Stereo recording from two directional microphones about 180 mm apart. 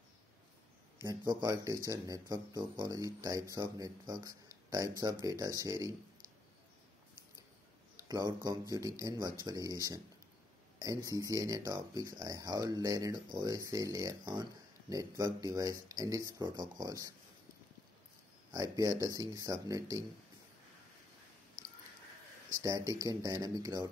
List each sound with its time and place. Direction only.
1.0 s speech: 25° right (ahead or behind)
8.1 s speech: 25° right (ahead or behind)
18.5 s speech: 20° right (ahead or behind)
22.5 s speech: 20° right (ahead or behind)